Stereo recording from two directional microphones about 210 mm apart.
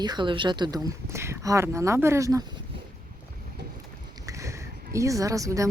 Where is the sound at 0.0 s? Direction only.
20° right (ahead or behind).